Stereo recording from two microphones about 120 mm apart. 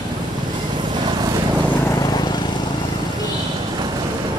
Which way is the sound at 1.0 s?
35° right (ahead or behind).